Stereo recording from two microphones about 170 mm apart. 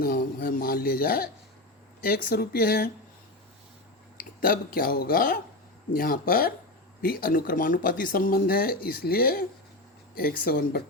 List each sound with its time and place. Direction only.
0.0 s speech: 60° left (ahead or behind)
4.2 s speech: 55° left (ahead or behind)